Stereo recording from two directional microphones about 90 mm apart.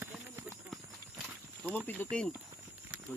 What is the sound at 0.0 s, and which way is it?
Clip-clop, 25° right (ahead or behind).